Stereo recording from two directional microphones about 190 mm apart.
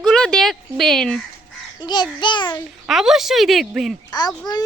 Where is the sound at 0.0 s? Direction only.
5° left (ahead or behind).